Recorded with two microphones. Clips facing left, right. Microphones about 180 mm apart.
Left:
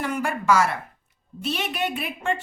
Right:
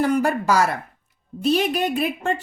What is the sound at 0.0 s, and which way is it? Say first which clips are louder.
A woman's voice: right 6 dB; 35° right (ahead or behind).